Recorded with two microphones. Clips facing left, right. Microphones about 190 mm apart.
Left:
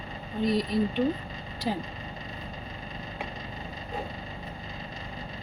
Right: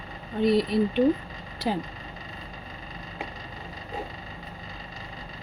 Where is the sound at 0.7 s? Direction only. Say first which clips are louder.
Right 3 dB; 65° right (ahead or behind).